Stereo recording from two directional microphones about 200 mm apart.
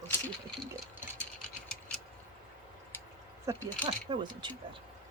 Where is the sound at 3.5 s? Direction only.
15° right (ahead or behind).